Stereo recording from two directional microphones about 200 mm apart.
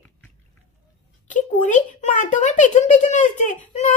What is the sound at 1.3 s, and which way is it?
A child's voice, 40° left (ahead or behind).